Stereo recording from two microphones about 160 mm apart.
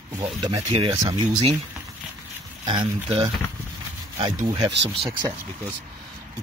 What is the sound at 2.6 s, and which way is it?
Speech, 30° right (ahead or behind).